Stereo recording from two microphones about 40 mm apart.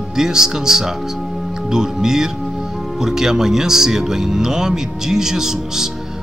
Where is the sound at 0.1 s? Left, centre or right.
Centre.